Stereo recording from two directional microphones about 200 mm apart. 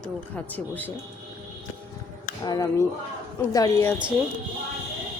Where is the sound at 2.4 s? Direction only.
20° left (ahead or behind).